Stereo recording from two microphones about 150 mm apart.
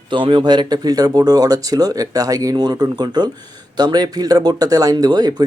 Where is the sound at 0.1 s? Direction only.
35° right (ahead or behind).